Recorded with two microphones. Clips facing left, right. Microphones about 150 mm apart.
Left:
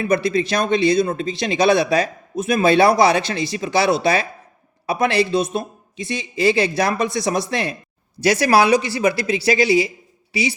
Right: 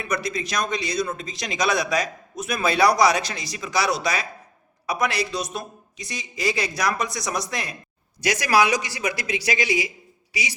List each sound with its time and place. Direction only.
0.1 s speech: 25° left (ahead or behind)